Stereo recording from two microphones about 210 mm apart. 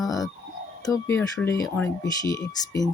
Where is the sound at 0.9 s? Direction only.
10° left (ahead or behind).